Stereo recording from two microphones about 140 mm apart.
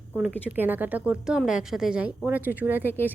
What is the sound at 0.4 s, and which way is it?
A woman's voice, 15° right (ahead or behind).